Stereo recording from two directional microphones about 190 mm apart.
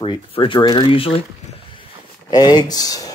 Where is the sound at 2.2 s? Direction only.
20° left (ahead or behind).